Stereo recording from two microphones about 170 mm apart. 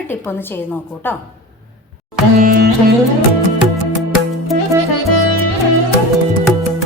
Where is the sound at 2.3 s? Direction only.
60° right (ahead or behind).